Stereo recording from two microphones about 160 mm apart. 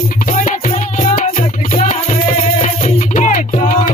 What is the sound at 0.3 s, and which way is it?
Music, 50° left (ahead or behind).